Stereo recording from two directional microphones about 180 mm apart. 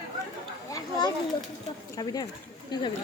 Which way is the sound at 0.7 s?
20° left (ahead or behind).